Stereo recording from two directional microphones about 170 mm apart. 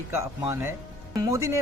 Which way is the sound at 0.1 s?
15° right (ahead or behind).